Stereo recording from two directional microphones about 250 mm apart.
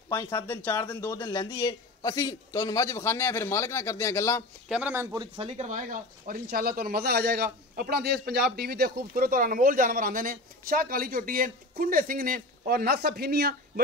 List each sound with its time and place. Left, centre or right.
0.1 s speech: centre
4.6 s speech: centre; by 13.6 s right